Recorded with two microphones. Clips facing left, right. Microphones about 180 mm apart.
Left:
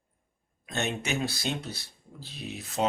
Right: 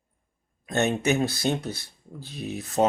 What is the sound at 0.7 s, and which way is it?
Speech, 45° right (ahead or behind).